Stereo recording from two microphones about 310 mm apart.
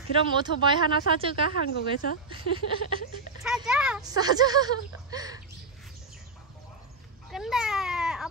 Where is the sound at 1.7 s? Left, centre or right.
Left.